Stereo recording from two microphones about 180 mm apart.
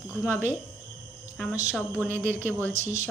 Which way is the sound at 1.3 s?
5° left (ahead or behind).